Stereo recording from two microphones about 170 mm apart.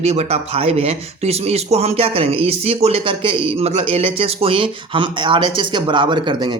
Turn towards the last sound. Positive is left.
turn(degrees=-30)  # may be behind; listen again after turning